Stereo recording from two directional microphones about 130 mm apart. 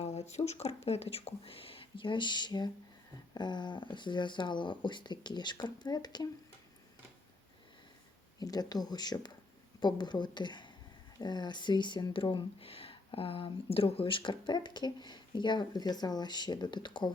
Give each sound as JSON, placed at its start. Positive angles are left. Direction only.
{"t": 0.0, "sound": "speech", "side_deg": 55}
{"t": 8.4, "sound": "speech", "side_deg": 30}